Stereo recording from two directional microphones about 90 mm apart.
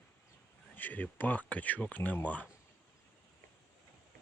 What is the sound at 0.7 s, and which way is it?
Speech, 20° left (ahead or behind).